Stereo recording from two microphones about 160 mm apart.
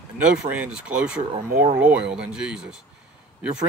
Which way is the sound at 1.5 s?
55° right (ahead or behind).